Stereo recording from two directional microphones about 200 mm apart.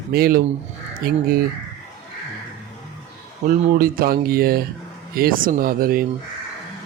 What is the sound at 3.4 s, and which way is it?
A man's voice, 45° right (ahead or behind).